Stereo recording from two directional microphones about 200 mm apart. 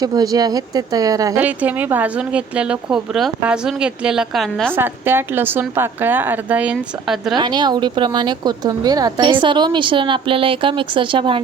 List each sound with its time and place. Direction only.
0.0 s speech: 20° right (ahead or behind); by 4.7 s centre (ahead or behind)
4.7 s speech: 10° right (ahead or behind)
7.3 s speech: 20° right (ahead or behind)